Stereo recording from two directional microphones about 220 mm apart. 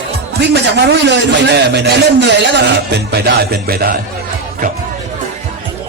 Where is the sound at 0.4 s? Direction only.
50° right (ahead or behind).